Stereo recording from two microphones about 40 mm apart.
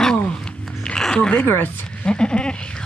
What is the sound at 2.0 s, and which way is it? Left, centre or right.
Speech, left.